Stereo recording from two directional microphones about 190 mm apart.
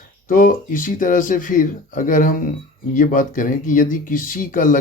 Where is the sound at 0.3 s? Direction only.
45° left (ahead or behind).